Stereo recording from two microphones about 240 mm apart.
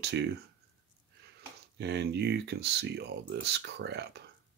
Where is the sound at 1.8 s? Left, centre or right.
Right.